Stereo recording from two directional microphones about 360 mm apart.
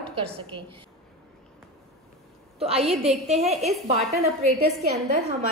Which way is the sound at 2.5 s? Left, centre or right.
Centre.